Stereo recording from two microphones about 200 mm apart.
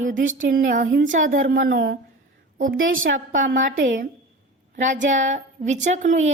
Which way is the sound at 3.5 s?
45° right (ahead or behind).